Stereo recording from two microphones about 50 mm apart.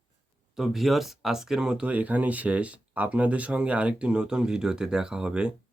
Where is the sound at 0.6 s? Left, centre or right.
Centre.